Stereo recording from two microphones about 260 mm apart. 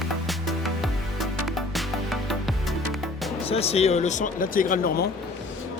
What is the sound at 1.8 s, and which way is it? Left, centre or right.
Music, centre.